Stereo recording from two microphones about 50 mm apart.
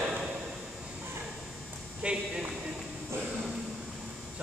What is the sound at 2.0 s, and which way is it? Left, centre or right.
Speech, right.